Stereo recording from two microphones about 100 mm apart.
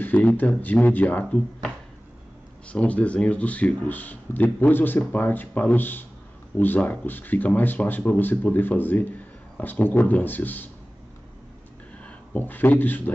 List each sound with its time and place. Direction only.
0.0 s speech: 15° left (ahead or behind)
2.7 s speech: 15° left (ahead or behind)
12.0 s speech: 15° left (ahead or behind)